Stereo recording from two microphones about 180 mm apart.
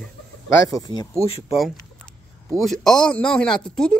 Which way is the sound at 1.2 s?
35° left (ahead or behind).